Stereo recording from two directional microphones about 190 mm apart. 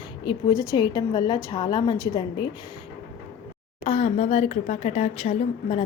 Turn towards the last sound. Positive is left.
turn(degrees=30)  # may be behind; listen again after turning